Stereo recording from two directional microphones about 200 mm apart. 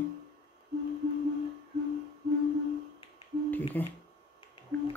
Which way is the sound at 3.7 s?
10° left (ahead or behind).